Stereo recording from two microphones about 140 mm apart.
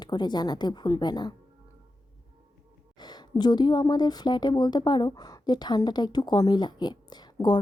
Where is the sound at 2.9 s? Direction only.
30° left (ahead or behind).